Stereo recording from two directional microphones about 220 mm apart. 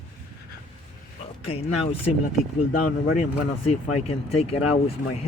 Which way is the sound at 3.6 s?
25° left (ahead or behind).